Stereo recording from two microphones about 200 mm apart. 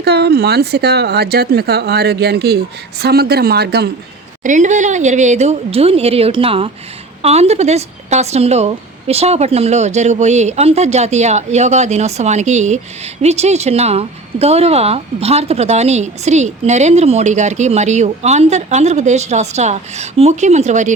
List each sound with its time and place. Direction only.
0.0 s a woman's voice: 55° right (ahead or behind)
4.4 s speech: 40° right (ahead or behind)